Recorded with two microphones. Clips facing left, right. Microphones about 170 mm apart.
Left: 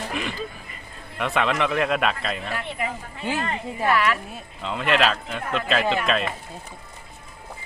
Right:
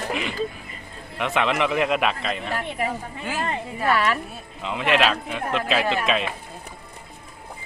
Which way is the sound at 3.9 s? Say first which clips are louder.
Even; 30° right (ahead or behind).